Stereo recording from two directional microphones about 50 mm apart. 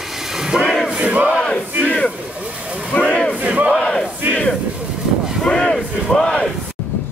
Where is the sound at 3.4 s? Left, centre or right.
Right.